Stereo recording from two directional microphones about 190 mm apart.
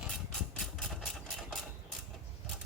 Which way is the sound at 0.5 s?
Centre (ahead or behind).